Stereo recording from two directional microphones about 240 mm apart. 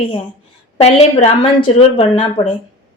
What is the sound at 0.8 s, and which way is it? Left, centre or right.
A woman's voice, left.